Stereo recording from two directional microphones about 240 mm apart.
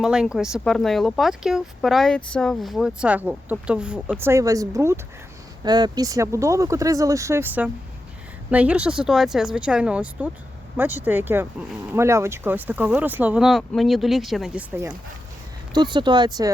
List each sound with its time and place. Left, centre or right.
0.0 s speech: centre
15.7 s speech: centre